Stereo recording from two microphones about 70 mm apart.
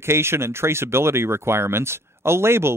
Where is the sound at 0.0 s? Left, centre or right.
Right.